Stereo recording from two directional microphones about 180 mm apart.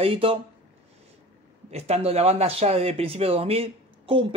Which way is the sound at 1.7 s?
35° right (ahead or behind).